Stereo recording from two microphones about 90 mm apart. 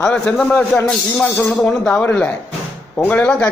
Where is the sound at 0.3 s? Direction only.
10° left (ahead or behind).